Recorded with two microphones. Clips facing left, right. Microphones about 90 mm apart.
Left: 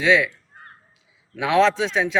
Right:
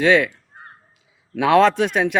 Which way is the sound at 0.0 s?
55° right (ahead or behind).